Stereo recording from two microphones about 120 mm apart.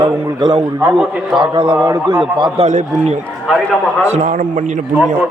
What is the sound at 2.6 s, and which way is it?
Speech, 90° right.